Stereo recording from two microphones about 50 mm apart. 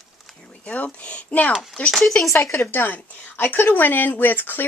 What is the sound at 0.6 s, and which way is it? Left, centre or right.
Speech, left.